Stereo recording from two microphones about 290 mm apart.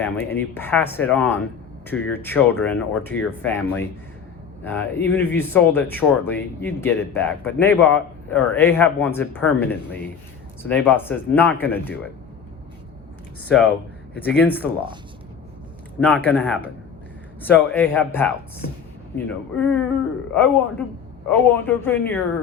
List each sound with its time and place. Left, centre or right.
0.0 s speech: centre
13.5 s speech: centre
16.0 s speech: centre